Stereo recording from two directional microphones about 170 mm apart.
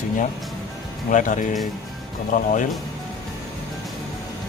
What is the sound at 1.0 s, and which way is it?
Speech, 50° left (ahead or behind).